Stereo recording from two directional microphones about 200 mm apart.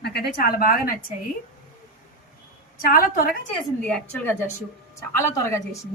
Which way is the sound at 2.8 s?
45° left (ahead or behind).